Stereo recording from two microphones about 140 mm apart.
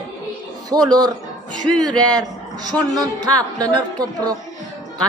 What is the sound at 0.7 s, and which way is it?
Speech, 30° right (ahead or behind).